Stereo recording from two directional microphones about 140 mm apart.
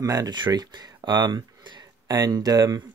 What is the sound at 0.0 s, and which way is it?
Speech, 25° right (ahead or behind).